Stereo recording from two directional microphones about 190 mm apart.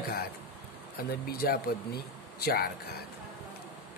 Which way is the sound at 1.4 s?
55° left (ahead or behind).